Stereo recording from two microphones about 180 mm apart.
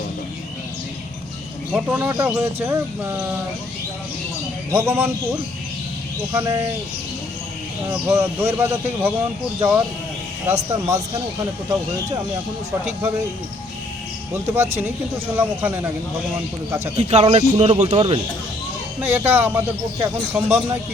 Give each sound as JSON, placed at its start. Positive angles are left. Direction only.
{"t": 1.7, "sound": "speech", "side_deg": -10}
{"t": 4.7, "sound": "speech", "side_deg": -10}
{"t": 7.9, "sound": "speech", "side_deg": -15}
{"t": 14.4, "sound": "speech", "side_deg": -10}
{"t": 17.0, "sound": "a man's voice", "side_deg": -35}
{"t": 18.9, "sound": "speech", "side_deg": -10}